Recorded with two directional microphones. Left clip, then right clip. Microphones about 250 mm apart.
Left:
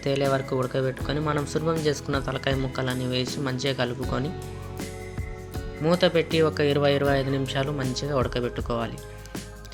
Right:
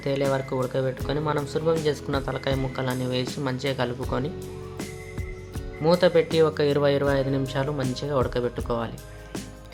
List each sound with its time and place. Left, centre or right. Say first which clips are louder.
0.0 s speech: even; centre
5.8 s speech: right 2 dB; centre